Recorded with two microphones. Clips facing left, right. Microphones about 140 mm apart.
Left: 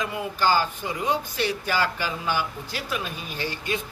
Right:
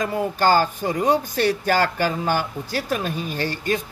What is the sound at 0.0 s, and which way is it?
Speech, 45° right (ahead or behind).